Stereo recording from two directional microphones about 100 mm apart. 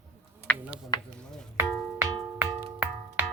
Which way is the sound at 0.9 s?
45° left (ahead or behind).